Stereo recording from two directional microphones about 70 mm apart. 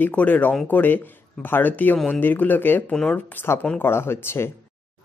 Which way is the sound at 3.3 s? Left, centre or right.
Left.